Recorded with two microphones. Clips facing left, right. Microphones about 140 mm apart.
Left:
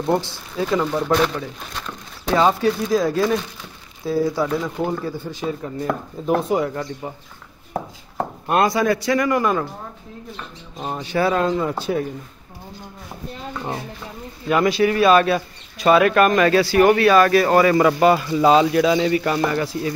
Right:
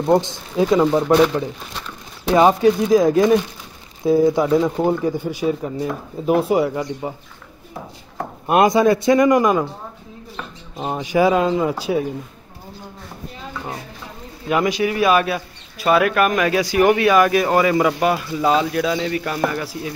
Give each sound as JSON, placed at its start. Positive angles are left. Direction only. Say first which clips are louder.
{"t": 0.0, "sound": "speech", "louder": "right 4 dB", "side_deg": -20}
{"t": 7.7, "sound": "a sound", "louder": "left 6 dB", "side_deg": 55}
{"t": 8.5, "sound": "speech", "louder": "right 4 dB", "side_deg": -20}
{"t": 10.8, "sound": "speech", "louder": "right 4 dB", "side_deg": -15}
{"t": 14.5, "sound": "speech", "louder": "left 2 dB", "side_deg": -15}